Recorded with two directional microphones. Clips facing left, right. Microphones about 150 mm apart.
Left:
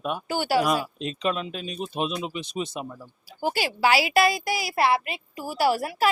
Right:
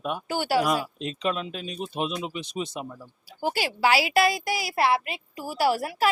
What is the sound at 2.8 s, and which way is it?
Speech, 25° left (ahead or behind).